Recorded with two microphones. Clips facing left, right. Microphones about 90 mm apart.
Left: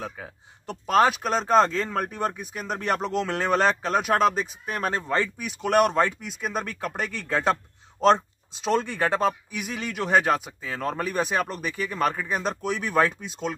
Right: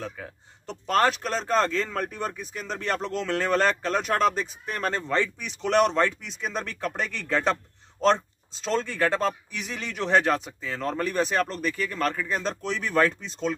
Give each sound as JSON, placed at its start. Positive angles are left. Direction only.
{"t": 0.0, "sound": "speech", "side_deg": 10}